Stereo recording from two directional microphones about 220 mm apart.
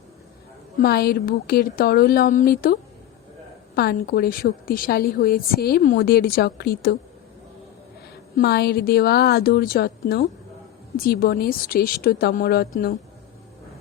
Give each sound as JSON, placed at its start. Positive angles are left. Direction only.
{"t": 0.8, "sound": "a woman's voice", "side_deg": 45}
{"t": 3.8, "sound": "a woman's voice", "side_deg": 45}
{"t": 8.4, "sound": "a woman's voice", "side_deg": 45}